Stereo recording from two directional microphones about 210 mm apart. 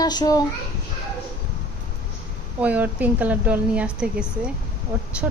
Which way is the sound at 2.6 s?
5° right (ahead or behind).